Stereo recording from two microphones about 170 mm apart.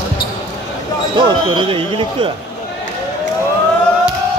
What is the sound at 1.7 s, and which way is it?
Speech, 30° right (ahead or behind).